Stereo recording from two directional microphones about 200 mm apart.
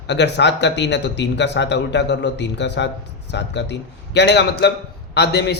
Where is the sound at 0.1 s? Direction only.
60° left (ahead or behind).